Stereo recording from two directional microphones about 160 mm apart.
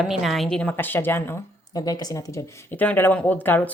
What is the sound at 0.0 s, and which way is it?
A woman's voice, centre (ahead or behind).